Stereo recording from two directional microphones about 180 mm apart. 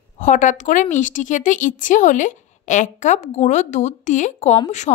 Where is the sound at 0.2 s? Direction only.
45° left (ahead or behind).